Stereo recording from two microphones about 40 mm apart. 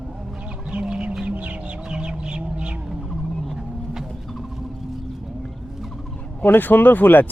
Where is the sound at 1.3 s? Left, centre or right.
Right.